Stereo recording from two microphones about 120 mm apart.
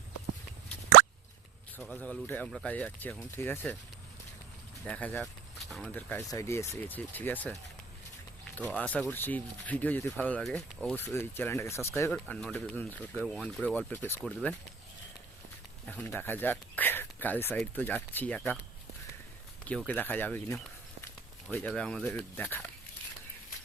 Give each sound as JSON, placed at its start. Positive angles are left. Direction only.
{"t": 1.8, "sound": "speech", "side_deg": 10}
{"t": 4.9, "sound": "speech", "side_deg": 10}
{"t": 5.2, "sound": "a sound", "side_deg": 0}
{"t": 5.9, "sound": "speech", "side_deg": 15}
{"t": 8.5, "sound": "speech", "side_deg": 10}
{"t": 10.9, "sound": "speech", "side_deg": 20}
{"t": 12.1, "sound": "speech", "side_deg": 5}
{"t": 15.9, "sound": "speech", "side_deg": 15}
{"t": 19.9, "sound": "speech", "side_deg": 15}
{"t": 21.6, "sound": "speech", "side_deg": 5}